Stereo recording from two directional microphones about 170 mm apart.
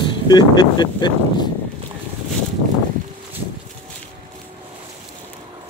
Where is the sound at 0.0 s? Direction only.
25° left (ahead or behind).